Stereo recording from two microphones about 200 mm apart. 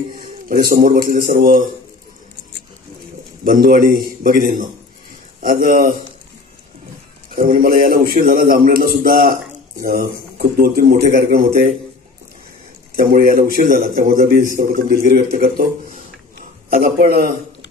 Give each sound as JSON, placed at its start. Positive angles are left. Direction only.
{"t": 0.1, "sound": "a man's voice", "side_deg": -45}
{"t": 3.4, "sound": "a man's voice", "side_deg": -45}
{"t": 7.6, "sound": "a man's voice", "side_deg": -45}
{"t": 12.9, "sound": "a man's voice", "side_deg": -50}
{"t": 16.7, "sound": "a man's voice", "side_deg": -50}